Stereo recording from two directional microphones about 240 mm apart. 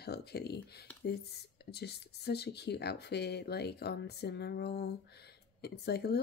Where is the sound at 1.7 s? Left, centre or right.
Left.